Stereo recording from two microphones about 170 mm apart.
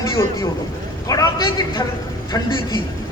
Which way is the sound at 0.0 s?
20° left (ahead or behind).